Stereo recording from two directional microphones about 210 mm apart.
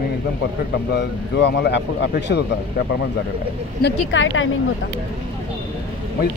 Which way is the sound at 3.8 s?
65° left (ahead or behind).